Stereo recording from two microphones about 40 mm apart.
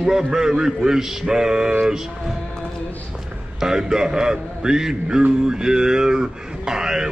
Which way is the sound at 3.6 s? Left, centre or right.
Centre.